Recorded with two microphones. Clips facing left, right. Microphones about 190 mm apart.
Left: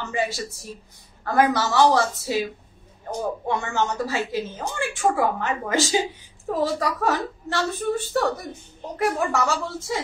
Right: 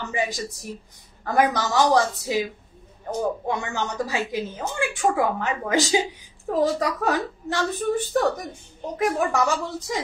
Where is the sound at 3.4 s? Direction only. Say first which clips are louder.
Left 2 dB; 15° right (ahead or behind).